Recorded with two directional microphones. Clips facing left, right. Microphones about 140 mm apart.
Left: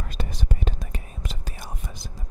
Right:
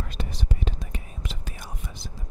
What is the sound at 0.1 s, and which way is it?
Whispering, 50° left (ahead or behind).